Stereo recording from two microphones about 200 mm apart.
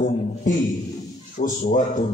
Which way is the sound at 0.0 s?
45° left (ahead or behind).